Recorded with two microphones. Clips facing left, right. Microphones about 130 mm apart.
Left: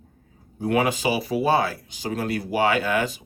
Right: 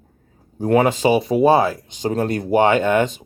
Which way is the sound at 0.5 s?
40° right (ahead or behind).